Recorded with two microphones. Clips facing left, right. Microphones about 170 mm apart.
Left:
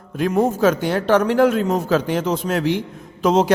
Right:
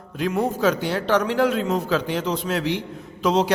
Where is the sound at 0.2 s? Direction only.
45° left (ahead or behind).